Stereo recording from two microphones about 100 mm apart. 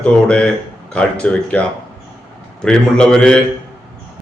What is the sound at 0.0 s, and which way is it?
A man's voice, 10° left (ahead or behind).